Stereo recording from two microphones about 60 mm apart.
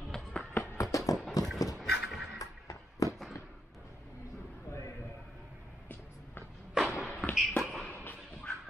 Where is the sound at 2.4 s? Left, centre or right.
Left.